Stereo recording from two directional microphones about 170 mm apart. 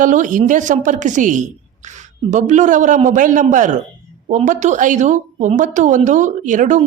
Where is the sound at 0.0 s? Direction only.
50° right (ahead or behind).